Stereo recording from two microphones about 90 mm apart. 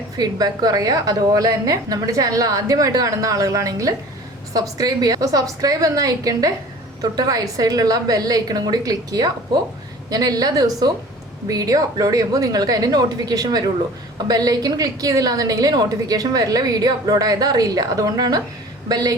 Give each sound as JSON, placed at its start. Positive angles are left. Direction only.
{"t": 0.2, "sound": "a woman's voice", "side_deg": -45}